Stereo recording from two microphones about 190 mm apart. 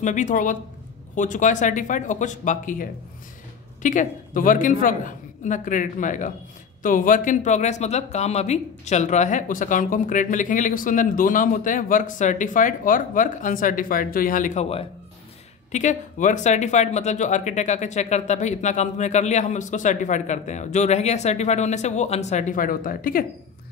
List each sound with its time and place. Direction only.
0.0 s speech: 40° left (ahead or behind)